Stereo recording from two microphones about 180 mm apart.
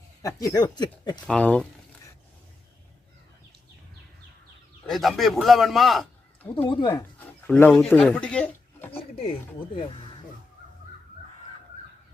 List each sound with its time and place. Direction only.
0.2 s speech: 20° left (ahead or behind)
1.3 s speech: 5° left (ahead or behind)
4.9 s a man's voice: centre (ahead or behind)
6.7 s speech: 25° left (ahead or behind)
7.4 s speech: 10° left (ahead or behind)